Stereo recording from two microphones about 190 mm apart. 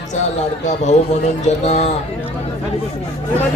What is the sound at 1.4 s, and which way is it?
Speech, 35° left (ahead or behind).